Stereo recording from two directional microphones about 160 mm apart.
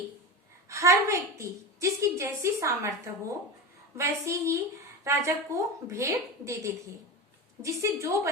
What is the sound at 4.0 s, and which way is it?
A woman's voice, 20° right (ahead or behind).